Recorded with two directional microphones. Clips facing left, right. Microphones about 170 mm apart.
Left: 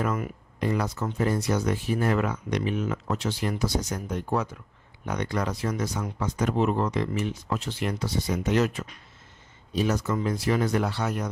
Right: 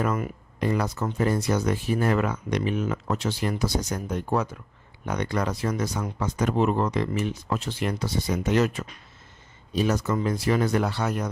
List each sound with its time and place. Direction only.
0.0 s speech: 45° right (ahead or behind)